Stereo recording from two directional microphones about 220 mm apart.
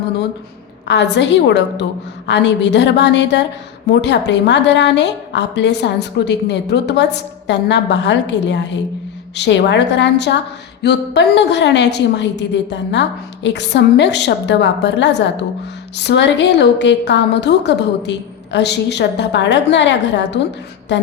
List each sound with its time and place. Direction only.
0.9 s a woman's voice: 50° left (ahead or behind)